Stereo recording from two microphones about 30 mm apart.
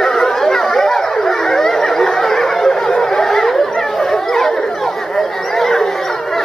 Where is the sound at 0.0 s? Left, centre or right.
Centre.